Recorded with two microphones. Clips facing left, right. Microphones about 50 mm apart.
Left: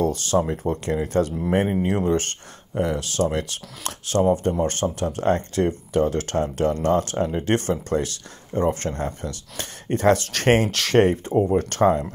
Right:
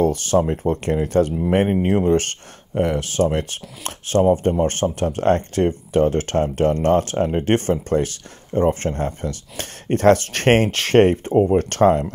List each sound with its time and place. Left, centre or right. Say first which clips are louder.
0.0 s speech: right 4 dB; right
9.6 s speech: right 4 dB; right